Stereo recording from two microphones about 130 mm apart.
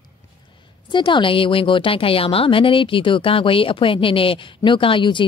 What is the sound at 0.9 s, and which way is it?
A woman's voice, 40° left (ahead or behind).